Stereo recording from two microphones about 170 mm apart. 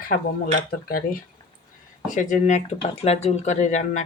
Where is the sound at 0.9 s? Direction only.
60° left (ahead or behind).